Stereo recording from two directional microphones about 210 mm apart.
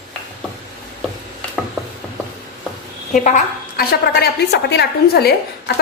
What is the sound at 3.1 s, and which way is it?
A woman's voice, 35° left (ahead or behind).